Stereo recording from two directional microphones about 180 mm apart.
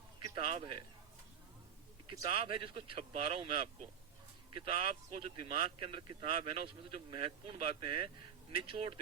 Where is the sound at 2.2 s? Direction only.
30° right (ahead or behind).